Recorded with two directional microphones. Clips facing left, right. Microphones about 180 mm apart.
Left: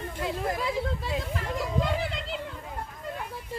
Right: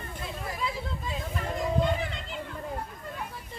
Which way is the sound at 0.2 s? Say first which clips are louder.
Left 5 dB; 90° left.